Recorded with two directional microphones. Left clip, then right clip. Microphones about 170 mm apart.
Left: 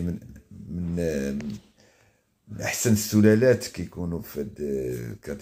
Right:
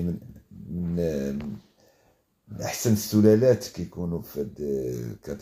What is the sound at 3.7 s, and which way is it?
Speech, 15° left (ahead or behind).